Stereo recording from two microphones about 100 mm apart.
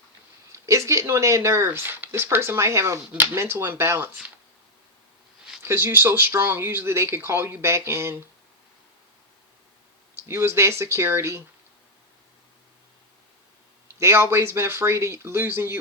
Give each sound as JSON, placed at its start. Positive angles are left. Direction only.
{"t": 0.5, "sound": "speech", "side_deg": -30}
{"t": 5.6, "sound": "speech", "side_deg": -25}
{"t": 10.2, "sound": "speech", "side_deg": -25}
{"t": 14.0, "sound": "speech", "side_deg": -25}